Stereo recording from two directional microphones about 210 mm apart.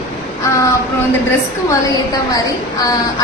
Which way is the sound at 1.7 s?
15° left (ahead or behind).